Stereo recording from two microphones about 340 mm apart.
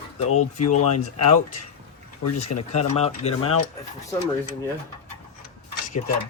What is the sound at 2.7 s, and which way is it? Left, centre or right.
Speech, centre.